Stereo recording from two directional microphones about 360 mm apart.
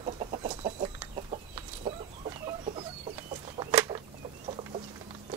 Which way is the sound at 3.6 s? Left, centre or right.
Centre.